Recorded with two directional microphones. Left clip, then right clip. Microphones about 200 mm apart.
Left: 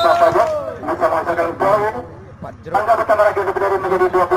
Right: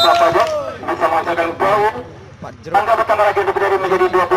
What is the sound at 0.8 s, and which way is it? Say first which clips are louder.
Speech: right 1 dB; 25° right (ahead or behind).